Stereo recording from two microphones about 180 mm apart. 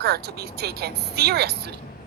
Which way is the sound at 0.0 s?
60° right (ahead or behind).